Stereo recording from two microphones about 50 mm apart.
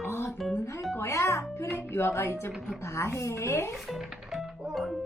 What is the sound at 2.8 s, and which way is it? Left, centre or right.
Speech, left.